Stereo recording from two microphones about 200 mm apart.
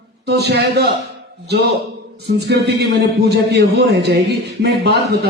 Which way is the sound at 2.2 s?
55° right (ahead or behind).